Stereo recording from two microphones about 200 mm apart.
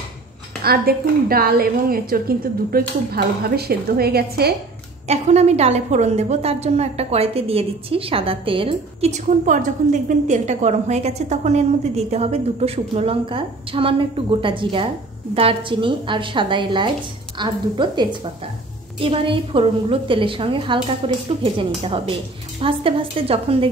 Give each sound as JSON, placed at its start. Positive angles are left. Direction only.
{"t": 0.7, "sound": "a woman's voice", "side_deg": -50}
{"t": 5.0, "sound": "a woman's voice", "side_deg": -35}